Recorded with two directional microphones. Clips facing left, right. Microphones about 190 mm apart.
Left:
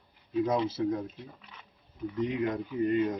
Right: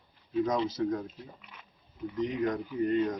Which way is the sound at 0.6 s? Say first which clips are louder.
Left 1 dB; 25° left (ahead or behind).